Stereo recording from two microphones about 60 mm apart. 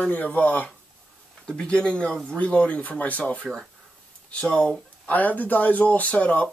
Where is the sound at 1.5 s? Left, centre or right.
Centre.